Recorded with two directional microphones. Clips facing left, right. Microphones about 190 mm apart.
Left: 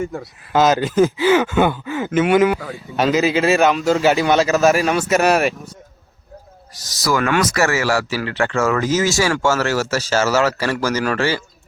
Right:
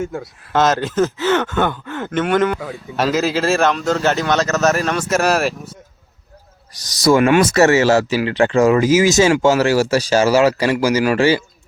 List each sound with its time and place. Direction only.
0.0 s speech: centre (ahead or behind)
7.0 s speech: 25° right (ahead or behind)